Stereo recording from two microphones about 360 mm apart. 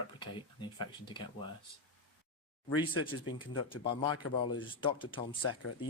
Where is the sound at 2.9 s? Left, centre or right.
Left.